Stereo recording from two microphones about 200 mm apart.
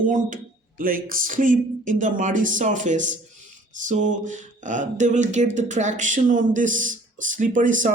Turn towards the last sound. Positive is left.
turn(degrees=-40)  # may be behind; listen again after turning